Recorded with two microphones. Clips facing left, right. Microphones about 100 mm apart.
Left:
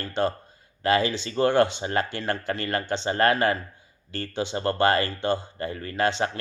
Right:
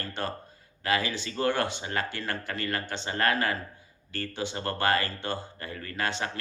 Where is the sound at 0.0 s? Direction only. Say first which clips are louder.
Left 8 dB; 25° left (ahead or behind).